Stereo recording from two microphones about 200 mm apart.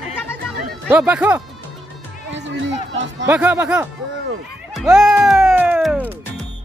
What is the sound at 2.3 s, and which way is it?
Run, 65° right (ahead or behind).